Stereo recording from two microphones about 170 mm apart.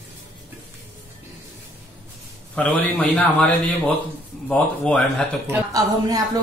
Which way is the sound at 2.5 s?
10° left (ahead or behind).